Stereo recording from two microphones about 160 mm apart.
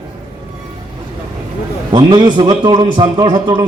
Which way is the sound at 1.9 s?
30° right (ahead or behind).